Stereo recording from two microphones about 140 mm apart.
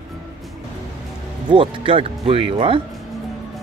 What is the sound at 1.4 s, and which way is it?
Speech, 40° right (ahead or behind).